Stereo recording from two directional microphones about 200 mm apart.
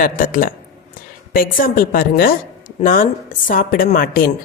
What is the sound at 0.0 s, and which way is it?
A woman's voice, 45° left (ahead or behind).